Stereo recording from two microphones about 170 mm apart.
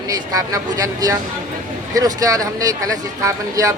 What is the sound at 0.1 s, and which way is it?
Speech, 20° right (ahead or behind).